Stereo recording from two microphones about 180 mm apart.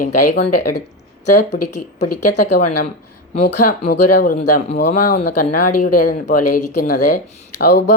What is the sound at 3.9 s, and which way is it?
Speech, 55° left (ahead or behind).